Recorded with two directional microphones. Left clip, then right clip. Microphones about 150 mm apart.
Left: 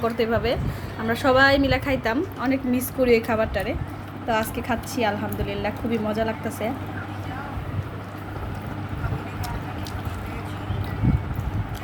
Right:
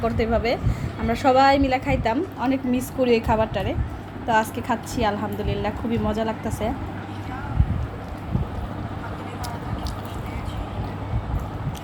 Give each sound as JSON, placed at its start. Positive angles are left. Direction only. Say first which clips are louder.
{"t": 0.0, "sound": "a woman's voice", "louder": "even", "side_deg": 0}